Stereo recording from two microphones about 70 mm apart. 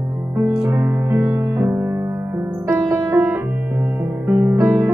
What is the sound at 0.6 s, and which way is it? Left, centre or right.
Music, right.